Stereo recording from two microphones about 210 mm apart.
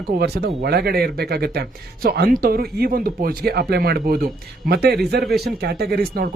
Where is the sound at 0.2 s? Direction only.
50° right (ahead or behind).